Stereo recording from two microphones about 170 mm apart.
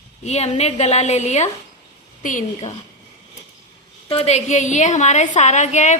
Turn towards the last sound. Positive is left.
turn(degrees=45)  # may be behind; listen again after turning